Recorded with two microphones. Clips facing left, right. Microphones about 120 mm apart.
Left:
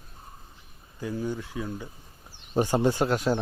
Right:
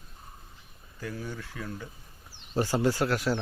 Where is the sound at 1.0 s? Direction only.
20° left (ahead or behind).